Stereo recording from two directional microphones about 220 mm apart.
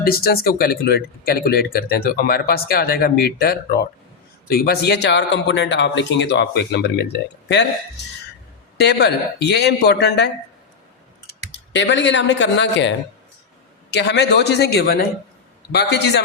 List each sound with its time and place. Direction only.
0.0 s speech: 45° left (ahead or behind)
8.8 s speech: 50° left (ahead or behind)
11.5 s speech: 55° left (ahead or behind)
13.9 s speech: 50° left (ahead or behind)